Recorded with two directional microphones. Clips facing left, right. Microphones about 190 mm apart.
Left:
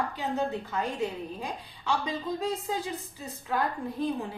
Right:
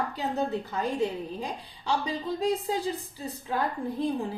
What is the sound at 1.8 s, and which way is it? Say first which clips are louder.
A woman's voice: right 1 dB; 35° right (ahead or behind).